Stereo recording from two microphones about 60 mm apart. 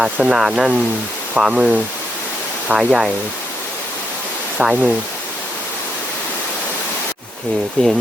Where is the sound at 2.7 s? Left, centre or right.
Centre.